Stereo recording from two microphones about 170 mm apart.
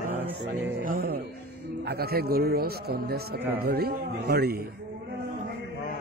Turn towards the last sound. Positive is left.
turn(degrees=-65)  # may be behind; listen again after turning